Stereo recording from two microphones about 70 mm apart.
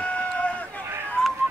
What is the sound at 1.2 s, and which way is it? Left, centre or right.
Music, centre.